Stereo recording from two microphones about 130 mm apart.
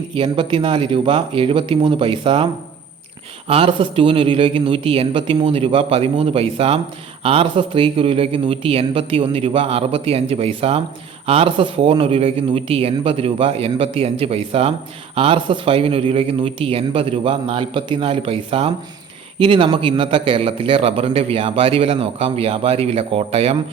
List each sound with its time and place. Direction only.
0.1 s a man's voice: 40° right (ahead or behind)